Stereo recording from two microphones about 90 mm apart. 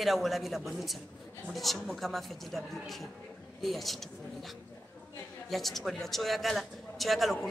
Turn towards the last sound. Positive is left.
turn(degrees=0)  # may be behind; listen again after turning